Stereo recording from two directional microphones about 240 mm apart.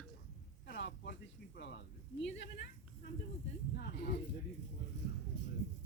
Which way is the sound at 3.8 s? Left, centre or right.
Left.